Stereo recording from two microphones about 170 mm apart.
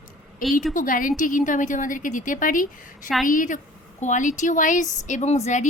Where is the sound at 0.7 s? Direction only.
55° left (ahead or behind).